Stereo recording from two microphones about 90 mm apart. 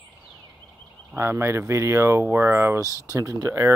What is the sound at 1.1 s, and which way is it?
Speech, 25° right (ahead or behind).